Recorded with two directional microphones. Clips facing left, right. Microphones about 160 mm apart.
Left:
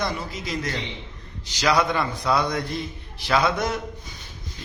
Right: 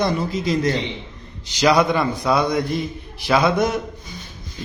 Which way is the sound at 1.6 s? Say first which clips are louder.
Right 5 dB; 15° right (ahead or behind).